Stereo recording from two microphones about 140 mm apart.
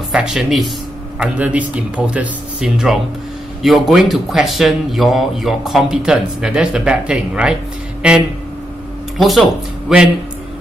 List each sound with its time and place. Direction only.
0.1 s speech: 5° right (ahead or behind)
9.2 s speech: centre (ahead or behind)